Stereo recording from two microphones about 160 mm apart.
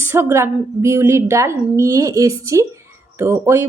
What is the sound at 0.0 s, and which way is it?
A woman's voice, 15° right (ahead or behind).